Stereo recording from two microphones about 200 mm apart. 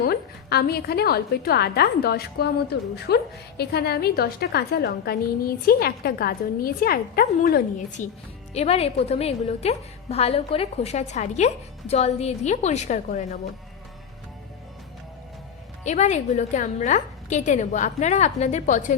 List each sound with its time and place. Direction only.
0.0 s a woman's voice: 50° left (ahead or behind)
8.5 s a woman's voice: 30° left (ahead or behind)
15.8 s a woman's voice: 35° left (ahead or behind)